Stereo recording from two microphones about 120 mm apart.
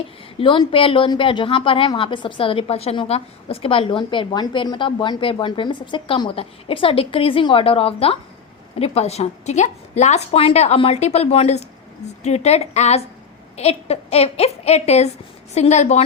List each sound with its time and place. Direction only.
0.3 s a woman's voice: 45° left (ahead or behind); by 16.0 s 75° left (ahead or behind)